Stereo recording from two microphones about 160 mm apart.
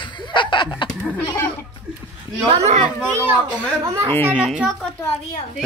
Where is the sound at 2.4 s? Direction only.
40° right (ahead or behind).